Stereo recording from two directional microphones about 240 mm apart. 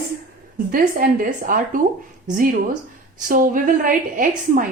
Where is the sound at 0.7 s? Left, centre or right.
Right.